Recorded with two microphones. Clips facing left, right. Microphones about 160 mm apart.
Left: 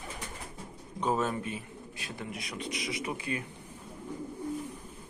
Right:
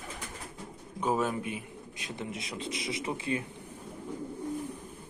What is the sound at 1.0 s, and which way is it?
A man's voice, 10° right (ahead or behind).